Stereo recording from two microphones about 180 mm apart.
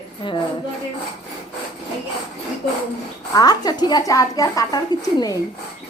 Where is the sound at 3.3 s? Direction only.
20° left (ahead or behind).